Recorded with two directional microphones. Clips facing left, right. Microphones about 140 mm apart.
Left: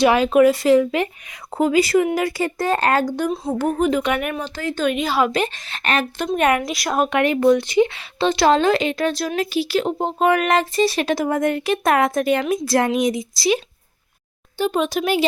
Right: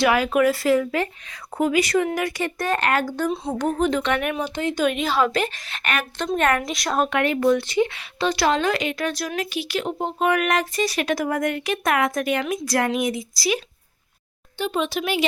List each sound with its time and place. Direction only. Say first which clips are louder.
0.0 s a woman's voice: left 5 dB; 25° left (ahead or behind)
3.2 s a child's voice: left 2 dB; centre (ahead or behind)
4.4 s speech: right 1 dB; 15° right (ahead or behind)
4.8 s a child's voice: left 2 dB; centre (ahead or behind)
5.2 s speech: left 2 dB; 15° left (ahead or behind)
5.6 s a woman's voice: left 5 dB; 30° left (ahead or behind)
6.1 s speech: left 1 dB; 15° left (ahead or behind)
6.6 s a woman's voice: left 2 dB; 5° left (ahead or behind); by 13.6 s 25° left (ahead or behind)
14.6 s speech: left 4 dB; 45° left (ahead or behind)